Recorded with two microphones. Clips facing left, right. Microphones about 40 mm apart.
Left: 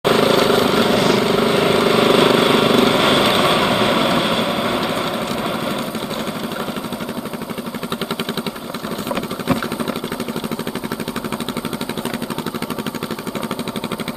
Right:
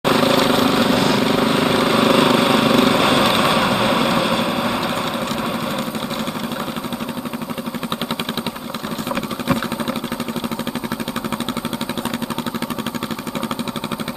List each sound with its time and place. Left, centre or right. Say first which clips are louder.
0.0 s vehicle: left 1 dB; left